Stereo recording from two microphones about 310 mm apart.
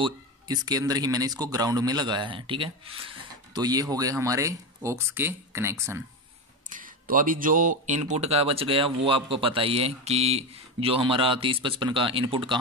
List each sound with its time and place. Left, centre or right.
0.0 s speech: centre
6.7 s speech: right